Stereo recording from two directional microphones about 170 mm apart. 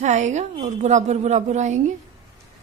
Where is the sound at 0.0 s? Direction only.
45° right (ahead or behind).